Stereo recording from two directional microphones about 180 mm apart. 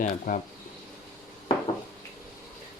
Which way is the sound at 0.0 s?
45° left (ahead or behind).